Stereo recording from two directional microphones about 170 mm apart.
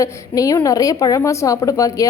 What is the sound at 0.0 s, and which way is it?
A woman's voice, 20° left (ahead or behind).